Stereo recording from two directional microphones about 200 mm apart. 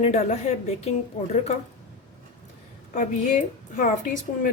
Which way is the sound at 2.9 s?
40° left (ahead or behind).